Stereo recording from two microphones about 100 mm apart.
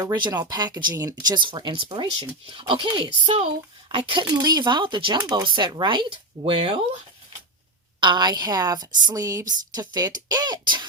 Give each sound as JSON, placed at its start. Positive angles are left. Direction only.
{"t": 0.0, "sound": "speech", "side_deg": -40}
{"t": 3.2, "sound": "speech", "side_deg": -85}
{"t": 3.9, "sound": "speech", "side_deg": -55}
{"t": 6.4, "sound": "speech", "side_deg": -65}
{"t": 8.0, "sound": "speech", "side_deg": -50}